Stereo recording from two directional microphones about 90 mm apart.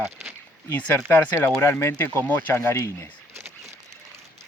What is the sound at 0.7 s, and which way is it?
Speech, 20° left (ahead or behind).